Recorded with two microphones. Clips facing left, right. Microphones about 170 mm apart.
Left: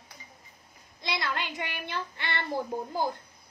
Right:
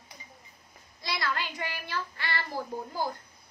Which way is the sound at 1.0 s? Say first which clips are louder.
Even; 20° left (ahead or behind).